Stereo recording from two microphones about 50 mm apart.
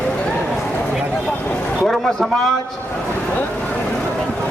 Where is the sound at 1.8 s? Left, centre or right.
Centre.